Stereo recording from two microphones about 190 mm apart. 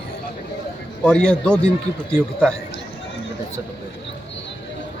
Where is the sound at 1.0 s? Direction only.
5° left (ahead or behind).